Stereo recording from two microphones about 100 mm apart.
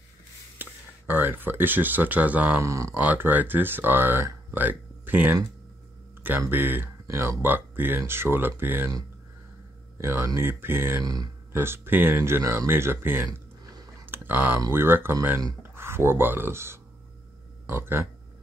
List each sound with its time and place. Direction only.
0.6 s speech: 20° right (ahead or behind)
2.6 s speech: 30° right (ahead or behind)
3.0 s speech: 15° right (ahead or behind)
6.5 s speech: 20° right (ahead or behind)
9.9 s speech: 25° right (ahead or behind)
13.3 s a sound: 40° right (ahead or behind)
14.0 s a sound: 20° right (ahead or behind)
14.7 s speech: 20° right (ahead or behind)